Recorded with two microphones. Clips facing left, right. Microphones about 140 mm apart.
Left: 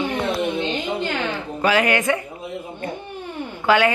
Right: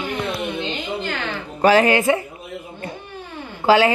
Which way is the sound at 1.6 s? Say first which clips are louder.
Right 5 dB; 35° right (ahead or behind).